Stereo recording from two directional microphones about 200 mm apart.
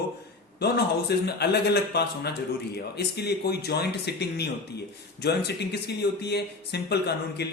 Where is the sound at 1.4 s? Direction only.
55° left (ahead or behind).